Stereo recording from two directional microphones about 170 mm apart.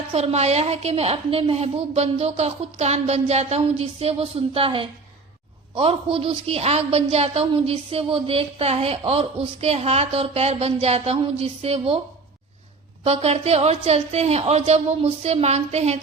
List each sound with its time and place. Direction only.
0.1 s a woman's voice: 40° right (ahead or behind)
13.1 s a woman's voice: 35° right (ahead or behind)